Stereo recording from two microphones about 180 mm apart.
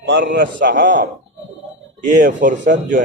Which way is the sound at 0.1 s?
80° right.